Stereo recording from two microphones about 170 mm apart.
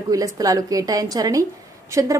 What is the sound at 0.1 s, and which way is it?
A woman's voice, 20° right (ahead or behind).